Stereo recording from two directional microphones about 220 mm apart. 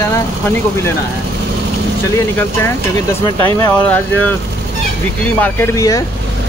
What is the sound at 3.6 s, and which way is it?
Speech, 10° left (ahead or behind).